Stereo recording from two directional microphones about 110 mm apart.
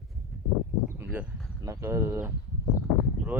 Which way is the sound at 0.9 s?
15° right (ahead or behind).